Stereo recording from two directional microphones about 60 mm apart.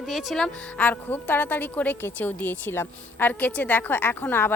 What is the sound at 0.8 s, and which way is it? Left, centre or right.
A woman's voice, left.